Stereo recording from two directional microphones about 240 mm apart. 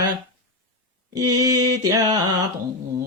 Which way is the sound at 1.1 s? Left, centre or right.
Centre.